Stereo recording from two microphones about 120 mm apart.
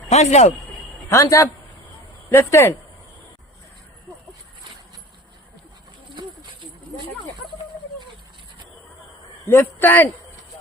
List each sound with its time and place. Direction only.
0.1 s a man's voice: 70° left (ahead or behind)
1.0 s a man's voice: 25° left (ahead or behind)
6.1 s horse: 40° right (ahead or behind)
9.4 s a man's voice: 20° left (ahead or behind)